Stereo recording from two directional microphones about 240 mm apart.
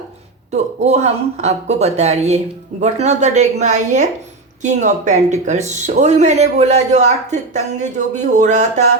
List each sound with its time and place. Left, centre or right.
0.5 s speech: right